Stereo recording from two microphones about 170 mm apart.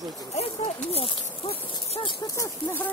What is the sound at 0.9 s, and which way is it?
Speech, 35° left (ahead or behind).